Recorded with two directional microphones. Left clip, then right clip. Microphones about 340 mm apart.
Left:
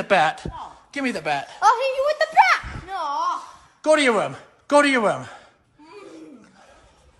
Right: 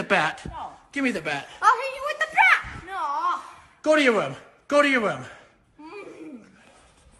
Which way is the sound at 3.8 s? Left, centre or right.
Centre.